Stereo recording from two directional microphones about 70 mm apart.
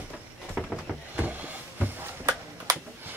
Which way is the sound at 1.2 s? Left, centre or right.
Right.